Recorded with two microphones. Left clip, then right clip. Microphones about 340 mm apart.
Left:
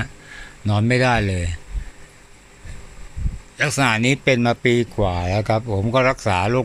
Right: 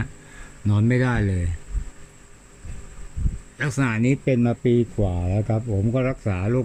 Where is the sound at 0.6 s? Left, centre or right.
Centre.